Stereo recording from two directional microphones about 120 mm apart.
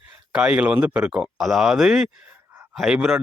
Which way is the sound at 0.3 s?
10° right (ahead or behind).